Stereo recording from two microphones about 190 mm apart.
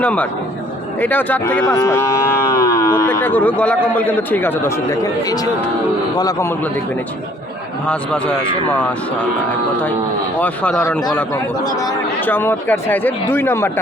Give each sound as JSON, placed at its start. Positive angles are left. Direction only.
{"t": 0.0, "sound": "speech", "side_deg": 5}
{"t": 0.9, "sound": "cattle", "side_deg": 10}
{"t": 3.9, "sound": "speech", "side_deg": 10}
{"t": 10.4, "sound": "speech", "side_deg": 5}